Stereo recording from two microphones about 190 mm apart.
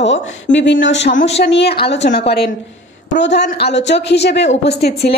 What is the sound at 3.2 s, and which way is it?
A woman's voice, 65° left (ahead or behind).